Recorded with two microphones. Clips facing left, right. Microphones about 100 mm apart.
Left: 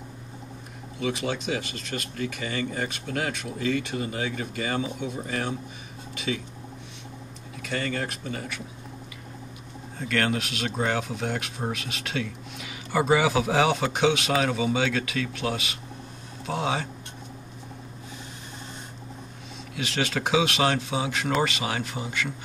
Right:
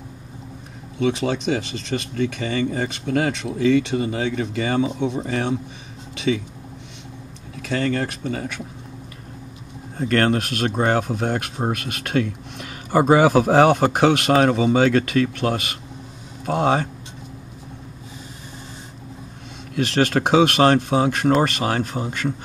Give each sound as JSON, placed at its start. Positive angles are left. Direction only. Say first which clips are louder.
{"t": 0.9, "sound": "speech", "louder": "right 7 dB", "side_deg": -65}
{"t": 7.7, "sound": "speech", "louder": "right 7 dB", "side_deg": -60}
{"t": 9.9, "sound": "speech", "louder": "right 7 dB", "side_deg": -45}
{"t": 19.7, "sound": "speech", "louder": "right 9 dB", "side_deg": -50}